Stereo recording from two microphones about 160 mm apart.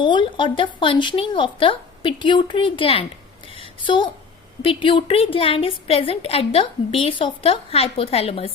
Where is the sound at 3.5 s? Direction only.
30° left (ahead or behind).